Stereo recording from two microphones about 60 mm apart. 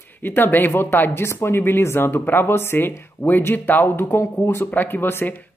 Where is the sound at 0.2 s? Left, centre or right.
Left.